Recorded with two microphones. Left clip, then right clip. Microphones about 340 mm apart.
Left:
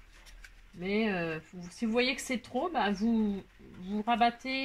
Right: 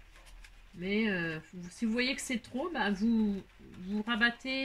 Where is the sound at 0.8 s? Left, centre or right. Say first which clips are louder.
Left 1 dB; centre.